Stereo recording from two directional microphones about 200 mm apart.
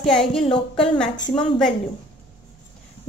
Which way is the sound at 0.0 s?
Centre (ahead or behind).